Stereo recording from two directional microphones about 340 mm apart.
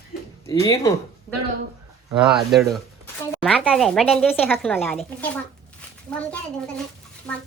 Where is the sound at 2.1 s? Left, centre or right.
Centre.